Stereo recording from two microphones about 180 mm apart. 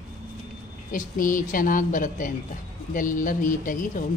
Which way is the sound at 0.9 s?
50° left (ahead or behind).